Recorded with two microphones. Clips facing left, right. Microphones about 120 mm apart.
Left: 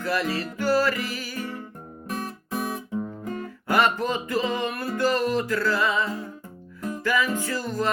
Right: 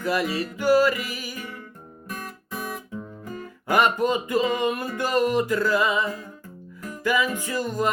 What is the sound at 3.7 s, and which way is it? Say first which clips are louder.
Music: right 2 dB; 15° right (ahead or behind).